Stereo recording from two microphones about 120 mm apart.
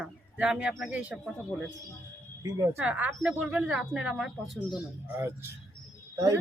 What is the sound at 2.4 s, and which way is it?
Speech, 25° right (ahead or behind).